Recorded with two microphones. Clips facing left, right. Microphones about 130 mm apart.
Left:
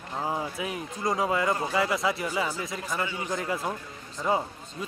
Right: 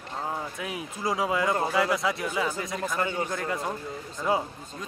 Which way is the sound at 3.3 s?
Centre (ahead or behind).